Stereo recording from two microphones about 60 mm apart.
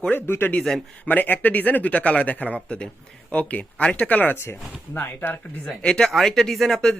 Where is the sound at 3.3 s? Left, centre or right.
Left.